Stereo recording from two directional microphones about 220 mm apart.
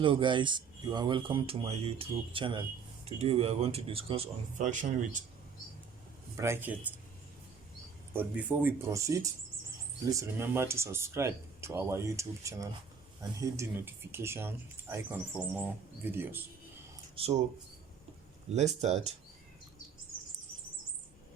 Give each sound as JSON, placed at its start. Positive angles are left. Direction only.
{"t": 0.0, "sound": "speech", "side_deg": -20}
{"t": 6.3, "sound": "speech", "side_deg": -10}
{"t": 8.1, "sound": "speech", "side_deg": -10}
{"t": 17.2, "sound": "speech", "side_deg": -25}
{"t": 18.8, "sound": "speech", "side_deg": -30}